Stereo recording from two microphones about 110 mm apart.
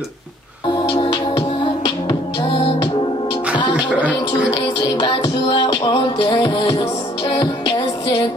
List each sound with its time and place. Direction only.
1.1 s music: 45° left (ahead or behind)
4.7 s music: 50° left (ahead or behind)